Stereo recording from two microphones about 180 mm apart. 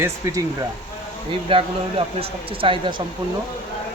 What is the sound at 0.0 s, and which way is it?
Speech, 15° right (ahead or behind).